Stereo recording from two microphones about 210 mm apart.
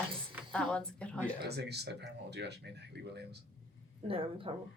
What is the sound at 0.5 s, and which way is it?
Speech, 5° left (ahead or behind).